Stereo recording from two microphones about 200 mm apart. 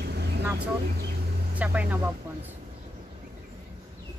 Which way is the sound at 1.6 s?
5° right (ahead or behind).